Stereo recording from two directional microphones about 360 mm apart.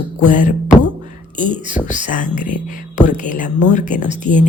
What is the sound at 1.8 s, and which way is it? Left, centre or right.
Music, left.